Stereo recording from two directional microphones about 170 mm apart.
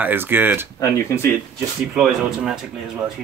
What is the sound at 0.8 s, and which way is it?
Speech, 15° left (ahead or behind).